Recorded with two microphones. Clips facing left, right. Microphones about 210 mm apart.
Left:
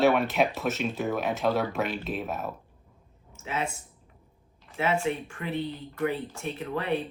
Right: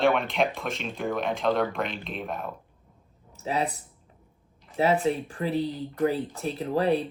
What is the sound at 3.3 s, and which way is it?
Speech, 35° right (ahead or behind).